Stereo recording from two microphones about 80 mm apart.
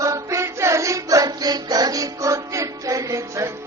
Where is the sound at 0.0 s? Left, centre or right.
Right.